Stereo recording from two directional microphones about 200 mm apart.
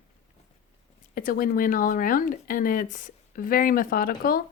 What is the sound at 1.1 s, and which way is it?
Speech, 45° left (ahead or behind).